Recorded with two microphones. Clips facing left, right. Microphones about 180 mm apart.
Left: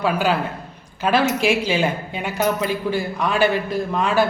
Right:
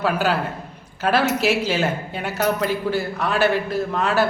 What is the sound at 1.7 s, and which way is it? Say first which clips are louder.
Speech: left 1 dB; 10° left (ahead or behind).